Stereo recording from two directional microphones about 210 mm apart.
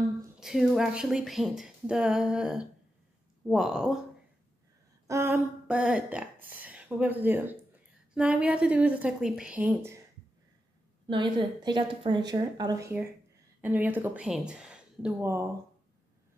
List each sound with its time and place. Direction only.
0.4 s speech: centre (ahead or behind)
5.0 s speech: 15° right (ahead or behind)
11.1 s a woman's voice: 20° right (ahead or behind)